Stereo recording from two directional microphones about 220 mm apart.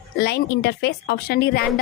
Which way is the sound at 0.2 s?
50° left (ahead or behind).